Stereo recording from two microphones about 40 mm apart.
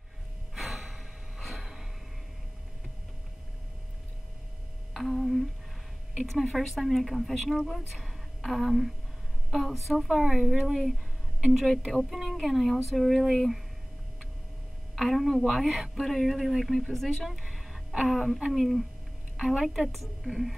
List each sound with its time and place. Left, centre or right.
0.6 s gasp: centre
4.9 s humming: centre
6.4 s a woman's voice: centre
11.9 s a woman's voice: centre
15.0 s a woman's voice: centre
15.4 s speech: right
15.9 s a woman's voice: centre
16.9 s speech: centre
17.3 s a sound: centre
18.5 s a woman's voice: centre
19.3 s a sound: right
19.6 s speech: centre
19.9 s a woman's voice: centre